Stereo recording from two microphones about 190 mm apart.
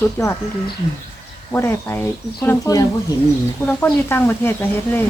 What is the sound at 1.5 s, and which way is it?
Speech, 10° left (ahead or behind).